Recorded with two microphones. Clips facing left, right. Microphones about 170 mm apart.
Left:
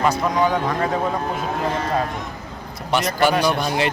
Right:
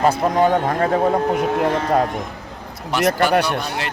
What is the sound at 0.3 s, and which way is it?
Speech, 50° right (ahead or behind).